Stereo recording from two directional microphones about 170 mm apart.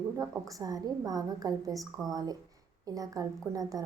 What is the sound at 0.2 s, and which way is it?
A woman's voice, 20° right (ahead or behind).